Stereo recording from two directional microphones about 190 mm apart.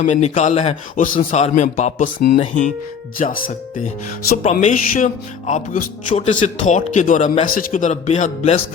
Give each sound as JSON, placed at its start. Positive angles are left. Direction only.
{"t": 0.0, "sound": "speech", "side_deg": 40}
{"t": 4.6, "sound": "speech", "side_deg": 40}